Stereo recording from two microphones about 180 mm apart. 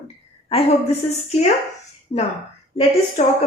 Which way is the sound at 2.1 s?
30° left (ahead or behind).